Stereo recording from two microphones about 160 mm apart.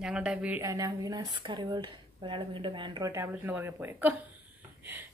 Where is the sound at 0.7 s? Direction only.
20° right (ahead or behind).